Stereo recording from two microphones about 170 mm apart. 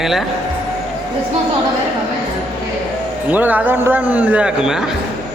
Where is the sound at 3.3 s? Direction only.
10° right (ahead or behind).